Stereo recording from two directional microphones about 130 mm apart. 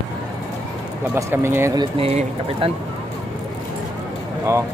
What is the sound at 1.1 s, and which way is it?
Speech, 20° right (ahead or behind).